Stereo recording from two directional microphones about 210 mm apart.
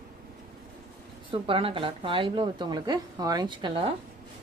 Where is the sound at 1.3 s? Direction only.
25° right (ahead or behind).